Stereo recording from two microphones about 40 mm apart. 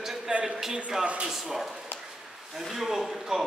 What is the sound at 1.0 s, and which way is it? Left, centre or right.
Speech, right.